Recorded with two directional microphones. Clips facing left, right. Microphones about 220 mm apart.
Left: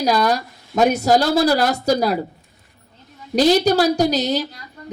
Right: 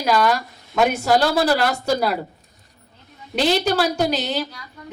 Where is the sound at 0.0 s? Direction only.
40° left (ahead or behind).